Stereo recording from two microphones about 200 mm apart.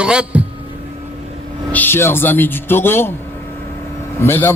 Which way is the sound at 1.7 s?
10° left (ahead or behind).